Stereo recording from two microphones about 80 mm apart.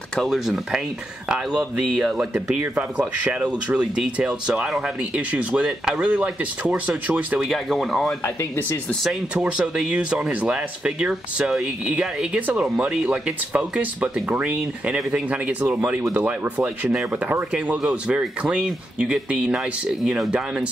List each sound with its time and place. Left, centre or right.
0.1 s speech: centre
0.5 s speech: centre
7.4 s speech: centre
9.3 s speech: centre
16.0 s speech: right; by 20.6 s centre